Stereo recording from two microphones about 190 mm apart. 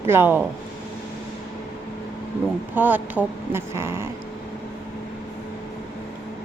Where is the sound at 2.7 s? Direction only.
10° right (ahead or behind).